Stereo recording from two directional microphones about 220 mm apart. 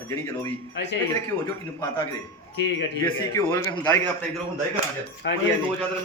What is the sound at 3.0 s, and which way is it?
Speech, 15° left (ahead or behind).